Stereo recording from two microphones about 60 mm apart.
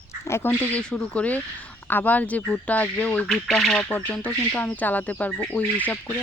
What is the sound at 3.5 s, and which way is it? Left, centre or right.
Speech, centre.